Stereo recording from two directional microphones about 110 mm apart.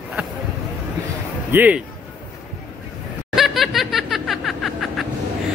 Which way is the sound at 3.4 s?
Centre (ahead or behind).